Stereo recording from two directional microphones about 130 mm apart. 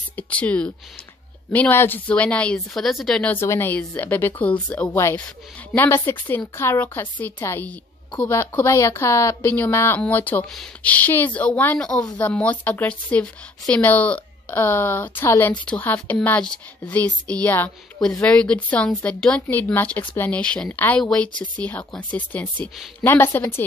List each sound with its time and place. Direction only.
0.1 s a woman's voice: 10° left (ahead or behind)
3.3 s a woman's voice: 20° left (ahead or behind)